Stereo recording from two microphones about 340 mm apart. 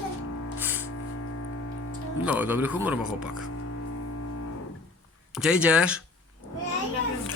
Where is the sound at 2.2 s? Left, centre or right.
Centre.